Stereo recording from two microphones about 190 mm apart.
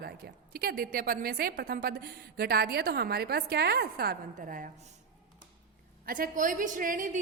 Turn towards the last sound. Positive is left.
turn(degrees=-45)  # may be behind; listen again after turning